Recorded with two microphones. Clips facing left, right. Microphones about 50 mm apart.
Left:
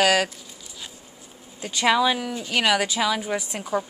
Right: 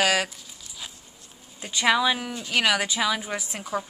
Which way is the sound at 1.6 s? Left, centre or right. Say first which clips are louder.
Left 2 dB; centre.